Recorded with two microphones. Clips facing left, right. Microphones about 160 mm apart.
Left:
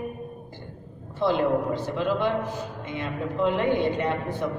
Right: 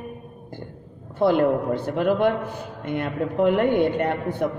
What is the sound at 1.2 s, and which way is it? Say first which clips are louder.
A woman's voice: right 4 dB; 55° right (ahead or behind).